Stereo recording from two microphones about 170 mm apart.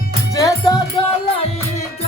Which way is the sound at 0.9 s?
35° left (ahead or behind).